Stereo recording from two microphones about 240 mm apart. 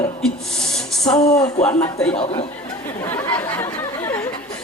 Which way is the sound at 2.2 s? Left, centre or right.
Left.